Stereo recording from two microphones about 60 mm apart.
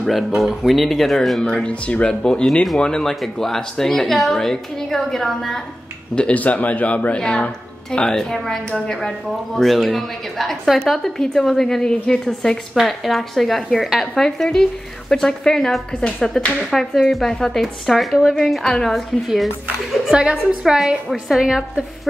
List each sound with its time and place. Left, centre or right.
0.4 s a woman's voice: centre
1.4 s a woman's voice: centre
6.1 s a woman's voice: left
12.7 s a woman's voice: centre
20.1 s a woman's voice: centre